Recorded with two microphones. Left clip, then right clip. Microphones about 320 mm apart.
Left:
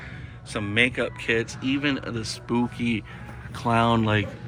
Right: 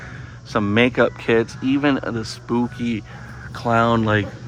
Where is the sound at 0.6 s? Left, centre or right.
Right.